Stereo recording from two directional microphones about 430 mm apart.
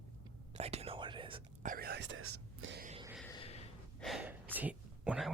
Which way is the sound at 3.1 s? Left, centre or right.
Centre.